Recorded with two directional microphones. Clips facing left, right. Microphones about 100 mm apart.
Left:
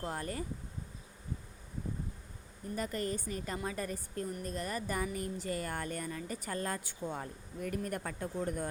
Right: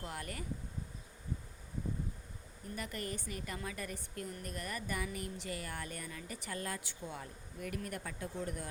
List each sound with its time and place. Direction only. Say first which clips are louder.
0.0 s a woman's voice: left 6 dB; 30° left (ahead or behind)
2.7 s a woman's voice: left 6 dB; 35° left (ahead or behind)